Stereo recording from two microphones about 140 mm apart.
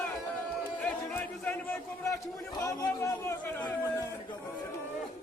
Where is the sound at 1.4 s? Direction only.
10° left (ahead or behind).